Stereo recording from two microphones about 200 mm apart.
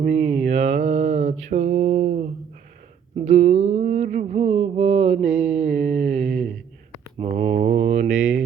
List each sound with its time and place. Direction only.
0.2 s mantra: 5° right (ahead or behind)
0.4 s mantra: 35° right (ahead or behind)